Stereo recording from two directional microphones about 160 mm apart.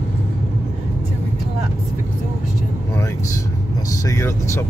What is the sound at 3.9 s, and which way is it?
Speech, 20° left (ahead or behind).